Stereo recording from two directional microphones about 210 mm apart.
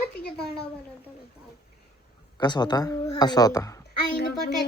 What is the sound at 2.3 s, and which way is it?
Speech, 20° left (ahead or behind).